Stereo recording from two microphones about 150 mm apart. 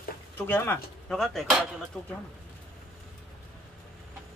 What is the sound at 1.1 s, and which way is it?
Speech, centre (ahead or behind).